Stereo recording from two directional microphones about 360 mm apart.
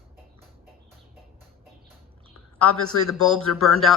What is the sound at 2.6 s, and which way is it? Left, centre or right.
Speech, left.